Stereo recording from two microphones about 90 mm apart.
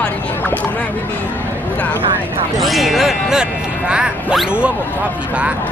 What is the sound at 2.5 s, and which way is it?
Speech, centre (ahead or behind).